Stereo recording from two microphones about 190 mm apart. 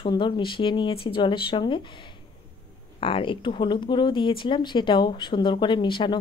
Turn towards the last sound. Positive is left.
turn(degrees=25)  # may be behind; listen again after turning